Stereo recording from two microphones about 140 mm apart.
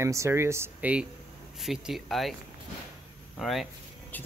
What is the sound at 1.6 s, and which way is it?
Speech, centre (ahead or behind).